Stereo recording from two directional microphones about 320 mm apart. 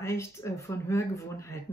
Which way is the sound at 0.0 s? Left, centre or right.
Centre.